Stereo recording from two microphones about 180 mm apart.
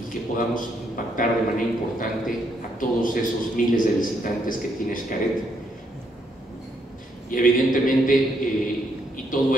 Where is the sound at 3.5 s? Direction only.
50° left (ahead or behind).